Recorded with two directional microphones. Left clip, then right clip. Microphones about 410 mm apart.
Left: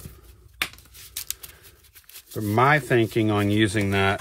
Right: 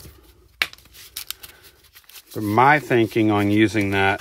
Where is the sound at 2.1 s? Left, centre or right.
Centre.